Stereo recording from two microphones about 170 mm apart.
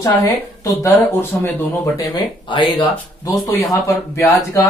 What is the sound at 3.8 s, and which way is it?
Speech, 15° left (ahead or behind).